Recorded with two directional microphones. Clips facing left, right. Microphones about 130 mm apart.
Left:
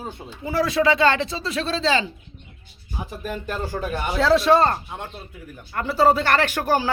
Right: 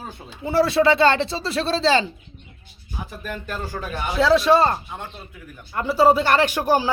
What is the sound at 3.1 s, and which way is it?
Speech, 25° left (ahead or behind).